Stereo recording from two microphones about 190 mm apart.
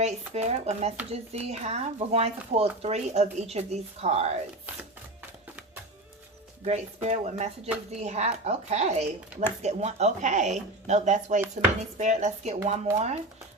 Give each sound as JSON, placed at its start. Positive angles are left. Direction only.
{"t": 0.0, "sound": "speech", "side_deg": -35}
{"t": 6.7, "sound": "speech", "side_deg": -35}